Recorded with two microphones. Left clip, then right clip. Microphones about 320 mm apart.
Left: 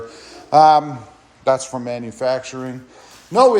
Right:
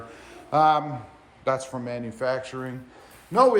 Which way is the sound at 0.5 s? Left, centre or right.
Centre.